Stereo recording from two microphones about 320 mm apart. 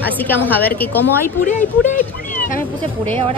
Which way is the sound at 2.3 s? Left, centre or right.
Left.